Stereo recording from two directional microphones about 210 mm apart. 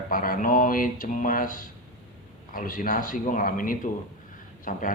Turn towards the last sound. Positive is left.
turn(degrees=40)  # may be behind; listen again after turning